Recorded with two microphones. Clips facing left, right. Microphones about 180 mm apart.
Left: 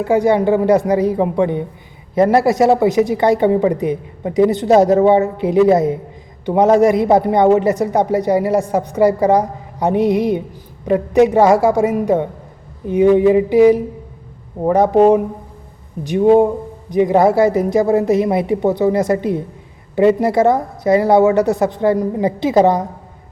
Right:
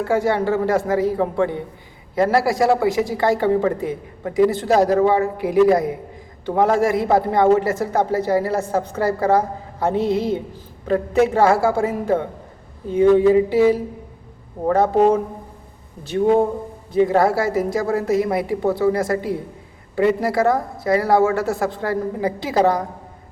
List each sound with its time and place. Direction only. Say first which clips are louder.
0.0 s a woman's voice: left 5 dB; 20° left (ahead or behind)